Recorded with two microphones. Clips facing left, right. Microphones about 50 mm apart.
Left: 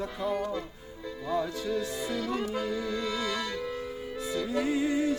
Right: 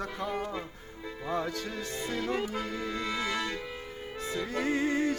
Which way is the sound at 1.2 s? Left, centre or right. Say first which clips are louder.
Left 3 dB; right.